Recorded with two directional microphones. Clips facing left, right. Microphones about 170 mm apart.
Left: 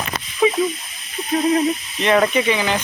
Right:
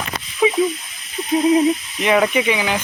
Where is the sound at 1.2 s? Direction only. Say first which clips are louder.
Right 2 dB; 20° left (ahead or behind).